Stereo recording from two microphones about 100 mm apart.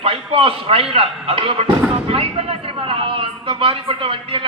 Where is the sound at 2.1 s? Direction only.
75° right (ahead or behind).